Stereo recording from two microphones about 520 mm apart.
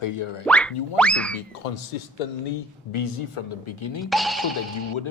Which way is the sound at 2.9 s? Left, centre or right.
Left.